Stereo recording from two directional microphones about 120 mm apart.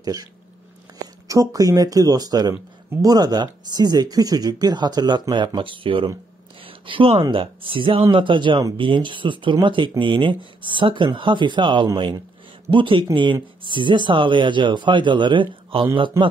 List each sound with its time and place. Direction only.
0.0 s speech: 30° right (ahead or behind)